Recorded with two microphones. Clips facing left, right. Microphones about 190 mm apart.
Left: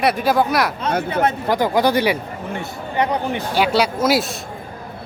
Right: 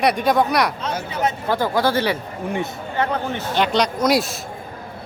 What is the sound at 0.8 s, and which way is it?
Speech, 55° left (ahead or behind).